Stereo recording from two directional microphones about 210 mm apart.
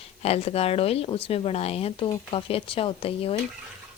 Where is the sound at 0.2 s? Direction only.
30° left (ahead or behind).